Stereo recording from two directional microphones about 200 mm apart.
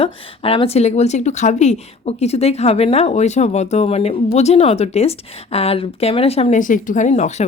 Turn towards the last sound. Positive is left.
turn(degrees=35)  # may be behind; listen again after turning